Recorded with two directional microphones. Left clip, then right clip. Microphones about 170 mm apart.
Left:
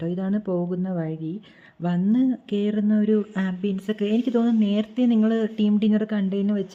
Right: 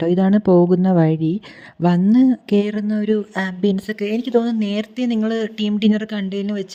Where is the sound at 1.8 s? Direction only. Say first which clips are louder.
Right 8 dB; 35° right (ahead or behind).